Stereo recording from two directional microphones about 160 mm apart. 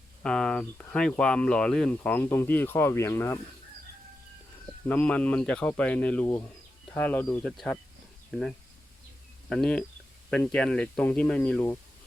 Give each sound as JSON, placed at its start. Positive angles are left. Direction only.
{"t": 0.2, "sound": "speech", "side_deg": 5}
{"t": 4.9, "sound": "speech", "side_deg": 10}